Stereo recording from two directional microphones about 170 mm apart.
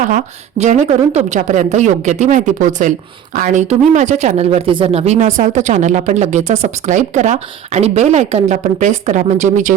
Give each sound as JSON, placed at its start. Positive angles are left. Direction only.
{"t": 0.1, "sound": "speech", "side_deg": -45}